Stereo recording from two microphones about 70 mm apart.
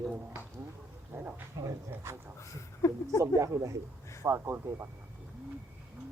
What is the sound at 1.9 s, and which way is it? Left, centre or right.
Speech, right.